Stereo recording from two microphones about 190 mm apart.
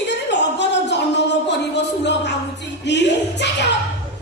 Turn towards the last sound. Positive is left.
turn(degrees=65)  # may be behind; listen again after turning